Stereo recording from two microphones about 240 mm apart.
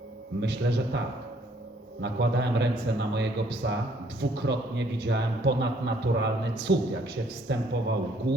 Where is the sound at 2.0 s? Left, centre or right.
Right.